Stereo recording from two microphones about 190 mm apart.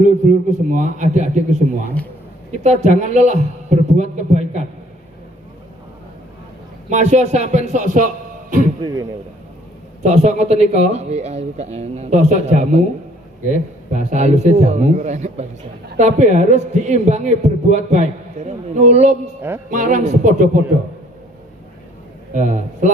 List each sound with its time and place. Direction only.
0.0 s a man's voice: 40° right (ahead or behind)
2.6 s a man's voice: 40° right (ahead or behind)
6.9 s a man's voice: 35° right (ahead or behind)
10.0 s a man's voice: 35° right (ahead or behind)
14.1 s a man's voice: 35° right (ahead or behind)
19.4 s music: 10° right (ahead or behind)
19.7 s a man's voice: 45° right (ahead or behind)
22.4 s a man's voice: 40° right (ahead or behind)